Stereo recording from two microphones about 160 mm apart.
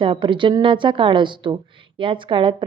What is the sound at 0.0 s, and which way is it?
A woman's voice, 30° right (ahead or behind).